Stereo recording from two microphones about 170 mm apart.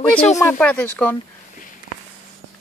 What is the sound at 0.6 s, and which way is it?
Speech, 10° left (ahead or behind).